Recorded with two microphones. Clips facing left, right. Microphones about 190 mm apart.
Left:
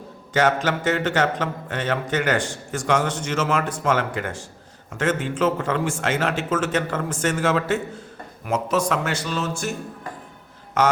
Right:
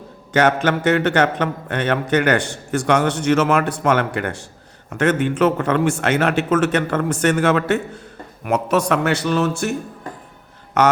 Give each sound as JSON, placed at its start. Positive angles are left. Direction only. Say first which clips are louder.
{"t": 0.3, "sound": "speech", "louder": "right 4 dB", "side_deg": -60}
{"t": 10.8, "sound": "speech", "louder": "right 4 dB", "side_deg": -65}